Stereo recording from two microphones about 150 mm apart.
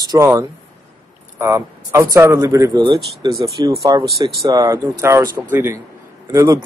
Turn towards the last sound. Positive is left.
turn(degrees=-20)  # may be behind; listen again after turning